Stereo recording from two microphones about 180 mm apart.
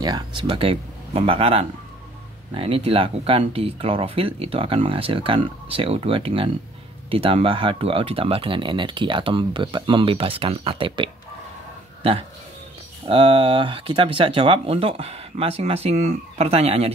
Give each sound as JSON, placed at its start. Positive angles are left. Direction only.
{"t": 0.0, "sound": "speech", "side_deg": -25}